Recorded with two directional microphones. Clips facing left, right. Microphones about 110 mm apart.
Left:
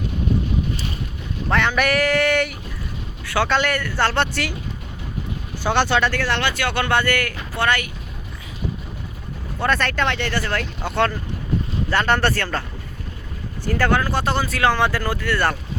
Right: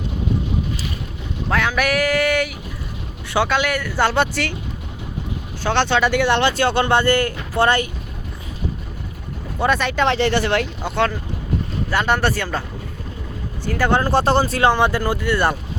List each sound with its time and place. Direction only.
1.5 s speech: 5° right (ahead or behind)
3.2 s speech: 15° right (ahead or behind)
3.5 s speech: 5° right (ahead or behind)
5.6 s speech: 5° left (ahead or behind)
6.0 s speech: 15° right (ahead or behind); by 7.9 s 30° right (ahead or behind)
9.6 s speech: 5° right (ahead or behind)
10.1 s speech: 30° right (ahead or behind)
10.6 s speech: centre (ahead or behind)
13.9 s speech: 30° right (ahead or behind); by 15.5 s 15° right (ahead or behind)